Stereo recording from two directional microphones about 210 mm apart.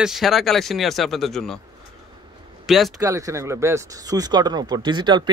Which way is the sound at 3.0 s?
15° right (ahead or behind).